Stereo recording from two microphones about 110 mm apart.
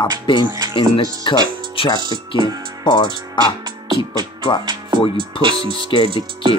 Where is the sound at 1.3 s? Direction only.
45° left (ahead or behind).